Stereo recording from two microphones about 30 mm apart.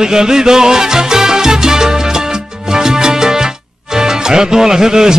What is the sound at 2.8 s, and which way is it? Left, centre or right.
Music, right.